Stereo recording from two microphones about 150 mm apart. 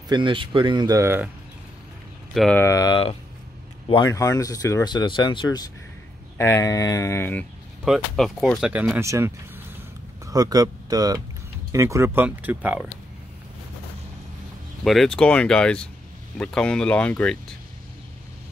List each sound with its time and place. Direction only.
0.1 s speech: 35° right (ahead or behind); by 1.3 s 15° right (ahead or behind)
2.3 s speech: centre (ahead or behind)
2.6 s speech: 25° left (ahead or behind)
7.8 s speech: centre (ahead or behind)
8.9 s speech: 15° right (ahead or behind)
14.9 s speech: 5° left (ahead or behind)